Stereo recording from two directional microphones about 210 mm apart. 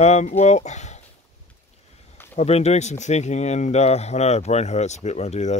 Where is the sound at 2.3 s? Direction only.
30° left (ahead or behind).